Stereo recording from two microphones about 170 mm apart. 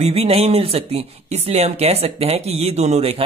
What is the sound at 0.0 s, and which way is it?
Speech, 35° right (ahead or behind).